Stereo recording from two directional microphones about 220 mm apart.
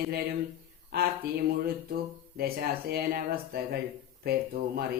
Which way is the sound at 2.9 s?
45° right (ahead or behind).